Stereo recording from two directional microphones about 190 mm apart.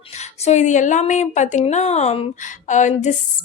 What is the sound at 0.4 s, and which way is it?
A woman's voice, 40° left (ahead or behind).